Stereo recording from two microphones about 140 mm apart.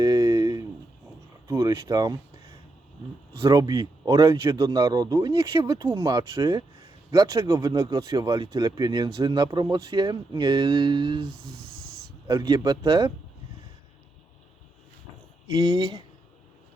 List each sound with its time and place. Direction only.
0.0 s a sound: 30° right (ahead or behind)
1.5 s speech: 25° right (ahead or behind)
3.4 s speech: 25° right (ahead or behind)
12.3 s speech: 30° right (ahead or behind)
15.4 s speech: 30° right (ahead or behind)